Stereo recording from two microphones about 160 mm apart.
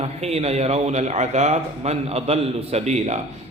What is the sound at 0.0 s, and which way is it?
A man's voice, 40° right (ahead or behind).